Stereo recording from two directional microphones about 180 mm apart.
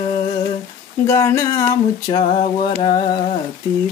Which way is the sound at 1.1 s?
15° left (ahead or behind).